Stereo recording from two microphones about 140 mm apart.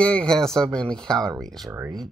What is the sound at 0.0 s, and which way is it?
Speech, 5° left (ahead or behind).